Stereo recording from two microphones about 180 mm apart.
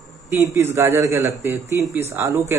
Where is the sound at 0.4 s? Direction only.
15° right (ahead or behind).